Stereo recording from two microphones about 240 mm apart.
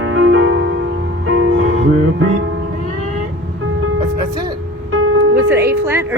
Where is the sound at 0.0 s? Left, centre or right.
Right.